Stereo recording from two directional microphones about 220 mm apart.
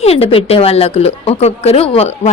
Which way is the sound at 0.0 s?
25° left (ahead or behind).